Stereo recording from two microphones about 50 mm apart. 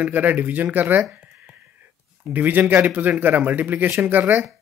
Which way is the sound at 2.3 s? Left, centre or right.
Right.